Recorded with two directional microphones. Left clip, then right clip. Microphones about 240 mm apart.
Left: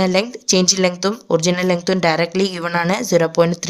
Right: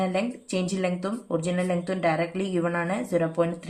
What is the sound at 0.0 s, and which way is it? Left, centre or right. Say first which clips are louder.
Speech: left 10 dB; left.